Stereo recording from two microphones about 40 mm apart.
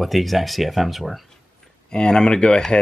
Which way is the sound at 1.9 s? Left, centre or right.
Centre.